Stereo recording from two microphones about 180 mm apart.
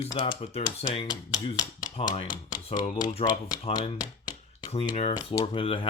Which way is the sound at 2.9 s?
25° left (ahead or behind).